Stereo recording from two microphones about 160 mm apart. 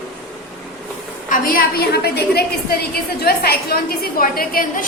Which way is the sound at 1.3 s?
65° left (ahead or behind).